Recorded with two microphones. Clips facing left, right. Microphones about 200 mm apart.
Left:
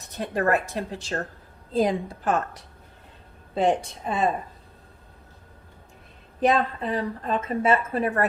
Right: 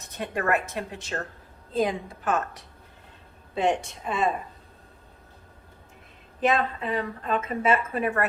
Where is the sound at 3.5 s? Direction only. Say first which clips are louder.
Left 2 dB; 35° left (ahead or behind).